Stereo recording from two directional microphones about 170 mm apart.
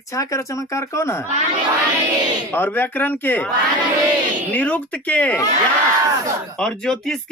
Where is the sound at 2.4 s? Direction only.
10° left (ahead or behind).